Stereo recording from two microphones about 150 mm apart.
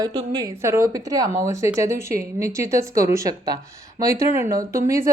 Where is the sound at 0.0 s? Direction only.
25° right (ahead or behind).